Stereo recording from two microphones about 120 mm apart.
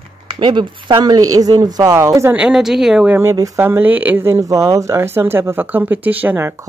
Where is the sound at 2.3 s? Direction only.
5° right (ahead or behind).